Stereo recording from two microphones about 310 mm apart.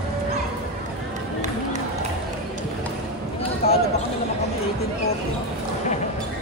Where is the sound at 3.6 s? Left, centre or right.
Centre.